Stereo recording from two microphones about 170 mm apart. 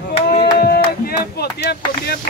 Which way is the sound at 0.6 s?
65° left (ahead or behind).